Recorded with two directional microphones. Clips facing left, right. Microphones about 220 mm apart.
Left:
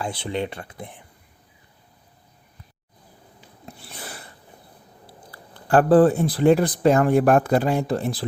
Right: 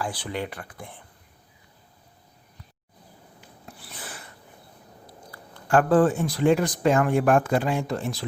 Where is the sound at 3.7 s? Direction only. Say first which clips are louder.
Left 3 dB; 25° left (ahead or behind).